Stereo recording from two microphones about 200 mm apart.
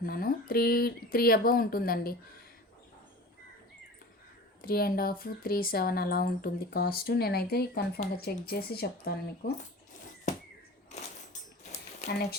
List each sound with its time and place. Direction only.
0.0 s speech: 45° left (ahead or behind)
4.6 s speech: 50° left (ahead or behind)
11.7 s a sound: 35° left (ahead or behind)
12.1 s speech: 50° left (ahead or behind)